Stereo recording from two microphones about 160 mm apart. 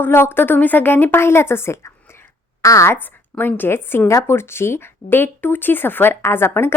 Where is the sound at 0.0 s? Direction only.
15° left (ahead or behind).